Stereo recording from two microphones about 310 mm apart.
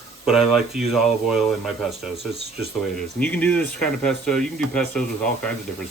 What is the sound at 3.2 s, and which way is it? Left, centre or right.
Speech, centre.